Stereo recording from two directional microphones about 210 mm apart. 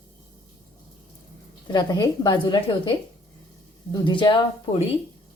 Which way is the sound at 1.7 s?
20° left (ahead or behind).